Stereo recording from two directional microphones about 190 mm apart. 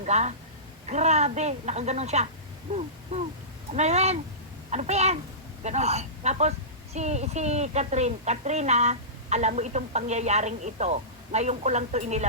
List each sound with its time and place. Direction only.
0.0 s a woman's voice: 40° right (ahead or behind)
2.7 s a sound: 35° right (ahead or behind)
3.7 s a woman's voice: 35° right (ahead or behind)